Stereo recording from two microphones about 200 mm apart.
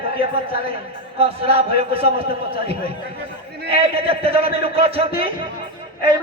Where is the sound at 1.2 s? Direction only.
30° right (ahead or behind).